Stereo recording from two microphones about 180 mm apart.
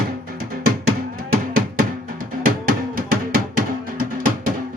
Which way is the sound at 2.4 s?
55° right (ahead or behind).